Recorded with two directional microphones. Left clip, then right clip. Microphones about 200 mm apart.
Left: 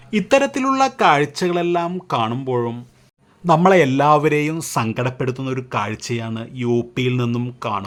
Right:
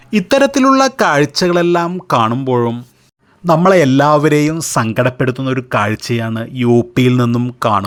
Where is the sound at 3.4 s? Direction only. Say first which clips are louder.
Right 4 dB; 15° right (ahead or behind); by 7.9 s 30° right (ahead or behind).